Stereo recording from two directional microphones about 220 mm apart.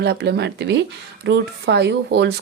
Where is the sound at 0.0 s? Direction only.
50° right (ahead or behind).